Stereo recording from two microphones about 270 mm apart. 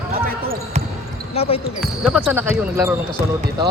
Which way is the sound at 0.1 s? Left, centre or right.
Right.